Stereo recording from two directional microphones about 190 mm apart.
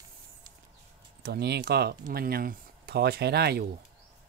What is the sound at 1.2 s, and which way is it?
Speech, 60° right (ahead or behind).